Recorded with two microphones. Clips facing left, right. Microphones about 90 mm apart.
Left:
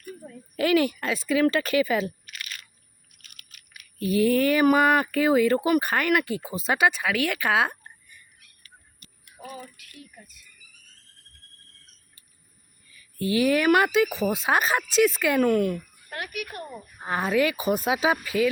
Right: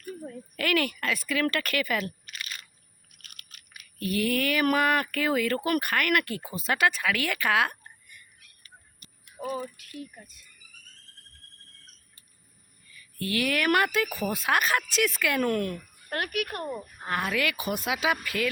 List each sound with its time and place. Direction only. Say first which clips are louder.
0.5 s speech: left 6 dB; 20° left (ahead or behind)
4.2 s speech: left 6 dB; 30° left (ahead or behind)
4.6 s speech: left 3 dB; 20° left (ahead or behind)
9.0 s a sound: right 6 dB; 30° right (ahead or behind)
13.1 s speech: left 6 dB; 20° left (ahead or behind)
13.7 s speech: left 2 dB; 10° left (ahead or behind)
13.9 s speech: left 5 dB; 20° left (ahead or behind)
15.4 s speech: left 7 dB; 5° left (ahead or behind)
16.0 s speech: right 5 dB; 60° right (ahead or behind)
17.2 s speech: left 6 dB; 30° left (ahead or behind)
18.3 s speech: left 6 dB; 15° left (ahead or behind)